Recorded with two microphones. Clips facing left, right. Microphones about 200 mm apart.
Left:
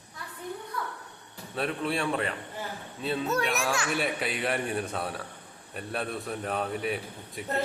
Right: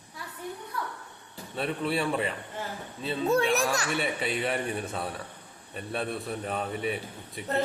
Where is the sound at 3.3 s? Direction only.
30° right (ahead or behind).